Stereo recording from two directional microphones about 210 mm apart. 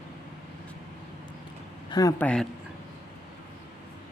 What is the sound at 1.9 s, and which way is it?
Speech, 15° left (ahead or behind).